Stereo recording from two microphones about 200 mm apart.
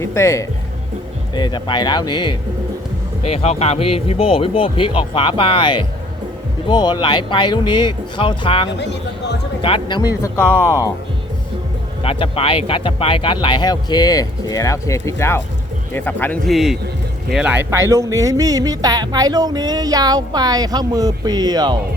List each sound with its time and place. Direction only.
0.0 s speech: 15° left (ahead or behind)
8.8 s speech: 60° left (ahead or behind)
9.6 s speech: 25° left (ahead or behind)
10.2 s speech: 10° left (ahead or behind)
12.0 s speech: 30° left (ahead or behind); by 21.8 s 20° right (ahead or behind)